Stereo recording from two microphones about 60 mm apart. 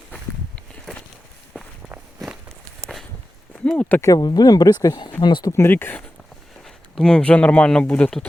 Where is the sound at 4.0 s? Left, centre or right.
Left.